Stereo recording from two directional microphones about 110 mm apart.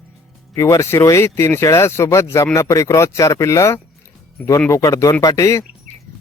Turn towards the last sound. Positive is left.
turn(degrees=30)  # may be behind; listen again after turning